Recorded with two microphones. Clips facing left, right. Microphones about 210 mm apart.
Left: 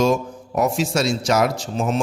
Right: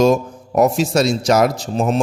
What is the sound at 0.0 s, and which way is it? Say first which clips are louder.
A man's voice: right 4 dB; 40° right (ahead or behind).